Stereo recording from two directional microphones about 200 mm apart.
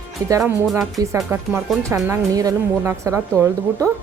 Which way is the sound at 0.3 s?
15° right (ahead or behind).